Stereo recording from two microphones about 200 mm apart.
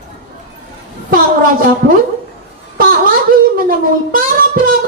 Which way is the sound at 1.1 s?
45° right (ahead or behind).